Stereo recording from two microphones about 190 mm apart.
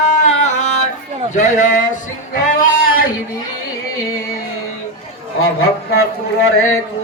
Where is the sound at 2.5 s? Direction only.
50° left (ahead or behind).